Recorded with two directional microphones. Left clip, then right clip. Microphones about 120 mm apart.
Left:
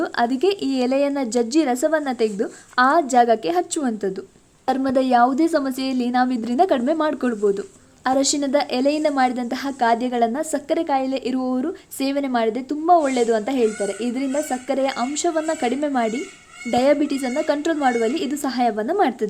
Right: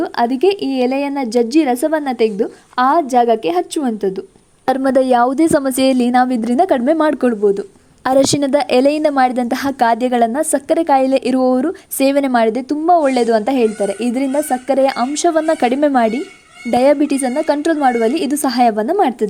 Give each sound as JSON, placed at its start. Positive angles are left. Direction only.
{"t": 0.0, "sound": "a woman's voice", "side_deg": -30}
{"t": 4.6, "sound": "a woman's voice", "side_deg": -90}
{"t": 8.0, "sound": "a woman's voice", "side_deg": -90}